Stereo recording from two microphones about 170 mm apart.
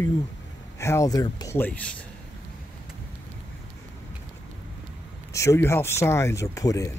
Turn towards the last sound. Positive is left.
turn(degrees=20)  # may be behind; listen again after turning